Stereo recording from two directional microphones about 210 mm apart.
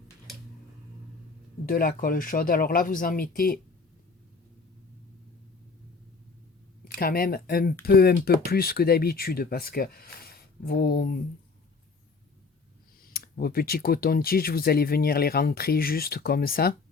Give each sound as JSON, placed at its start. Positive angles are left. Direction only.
{"t": 1.6, "sound": "speech", "side_deg": 45}
{"t": 6.8, "sound": "speech", "side_deg": 45}
{"t": 13.1, "sound": "speech", "side_deg": 45}